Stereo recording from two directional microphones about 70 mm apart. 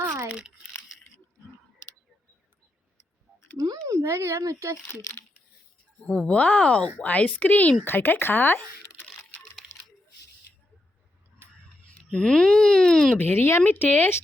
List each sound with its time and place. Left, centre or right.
0.3 s speech: centre
3.8 s a child's voice: right
6.1 s speech: centre
11.4 s tick-tock: right
11.9 s speech: centre
13.1 s speech: left